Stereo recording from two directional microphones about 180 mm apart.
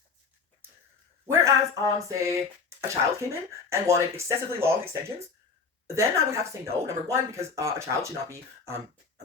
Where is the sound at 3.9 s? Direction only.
15° right (ahead or behind).